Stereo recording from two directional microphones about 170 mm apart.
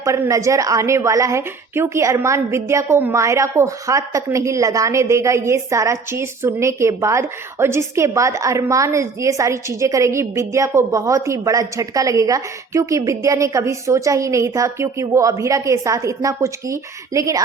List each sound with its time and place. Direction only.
0.0 s a woman's voice: 15° right (ahead or behind)